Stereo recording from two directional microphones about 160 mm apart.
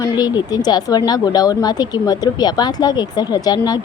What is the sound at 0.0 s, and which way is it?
Speech, 25° left (ahead or behind).